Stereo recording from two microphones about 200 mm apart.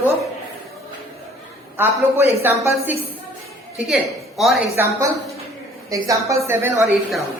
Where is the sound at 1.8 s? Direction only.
10° right (ahead or behind).